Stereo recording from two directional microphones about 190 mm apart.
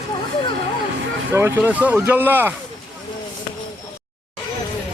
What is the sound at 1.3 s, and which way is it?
Speech, 10° right (ahead or behind).